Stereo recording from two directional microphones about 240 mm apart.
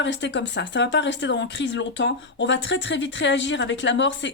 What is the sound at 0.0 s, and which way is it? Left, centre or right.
Speech, left.